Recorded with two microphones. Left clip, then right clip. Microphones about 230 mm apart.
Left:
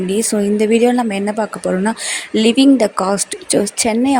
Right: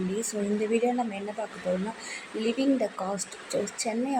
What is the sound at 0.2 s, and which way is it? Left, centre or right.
Speech, left.